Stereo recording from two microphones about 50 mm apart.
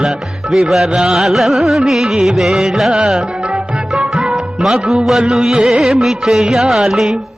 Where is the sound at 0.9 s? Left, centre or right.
Centre.